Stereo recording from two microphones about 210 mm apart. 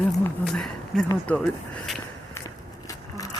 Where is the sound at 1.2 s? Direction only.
5° left (ahead or behind).